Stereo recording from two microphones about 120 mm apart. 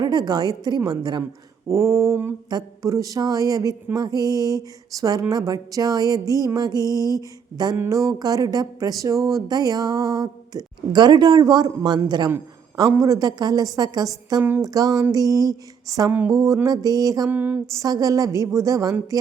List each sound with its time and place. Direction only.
0.0 s speech: 35° right (ahead or behind)
1.6 s a woman's voice: 25° right (ahead or behind)
17.2 s a sound: 15° right (ahead or behind)
17.7 s a woman's voice: 30° right (ahead or behind)